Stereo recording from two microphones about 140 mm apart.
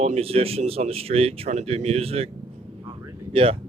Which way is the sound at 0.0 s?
45° right (ahead or behind).